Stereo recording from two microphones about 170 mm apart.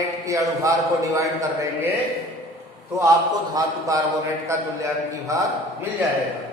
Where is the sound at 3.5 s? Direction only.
20° right (ahead or behind).